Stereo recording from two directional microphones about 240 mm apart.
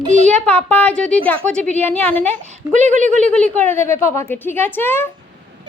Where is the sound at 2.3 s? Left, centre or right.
Right.